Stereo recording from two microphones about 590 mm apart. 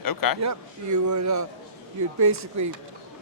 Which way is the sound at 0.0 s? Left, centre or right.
Left.